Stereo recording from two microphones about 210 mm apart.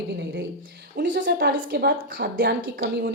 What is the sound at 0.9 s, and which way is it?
A woman's voice, 50° right (ahead or behind).